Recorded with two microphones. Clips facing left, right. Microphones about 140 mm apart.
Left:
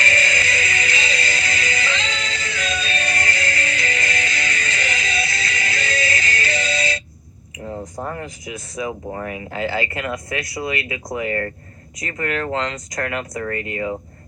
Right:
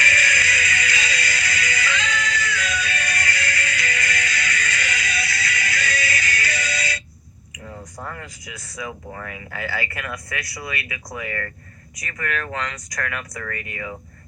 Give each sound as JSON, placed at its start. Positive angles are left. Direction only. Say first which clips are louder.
{"t": 0.0, "sound": "music", "louder": "left 2 dB", "side_deg": 25}
{"t": 7.6, "sound": "a sound", "louder": "left 8 dB", "side_deg": 25}
{"t": 8.0, "sound": "speech", "louder": "left 6 dB", "side_deg": 25}